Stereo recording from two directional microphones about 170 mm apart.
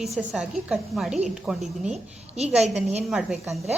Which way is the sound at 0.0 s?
Centre (ahead or behind).